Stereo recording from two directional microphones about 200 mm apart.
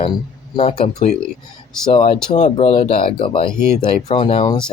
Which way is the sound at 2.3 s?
30° left (ahead or behind).